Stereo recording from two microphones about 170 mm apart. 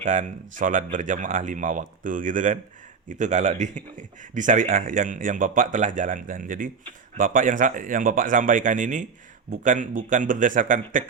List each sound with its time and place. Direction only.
0.0 s speech: 45° right (ahead or behind)